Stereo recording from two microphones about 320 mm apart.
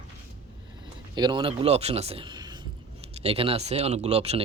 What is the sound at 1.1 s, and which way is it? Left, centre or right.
Speech, centre.